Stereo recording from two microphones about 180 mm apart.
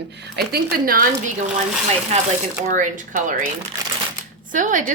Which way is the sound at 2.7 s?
45° right (ahead or behind).